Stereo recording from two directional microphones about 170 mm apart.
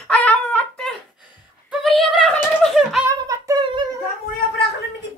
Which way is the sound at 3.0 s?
20° right (ahead or behind).